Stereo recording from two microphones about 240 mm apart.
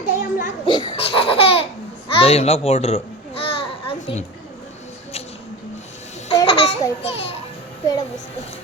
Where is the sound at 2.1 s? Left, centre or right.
Left.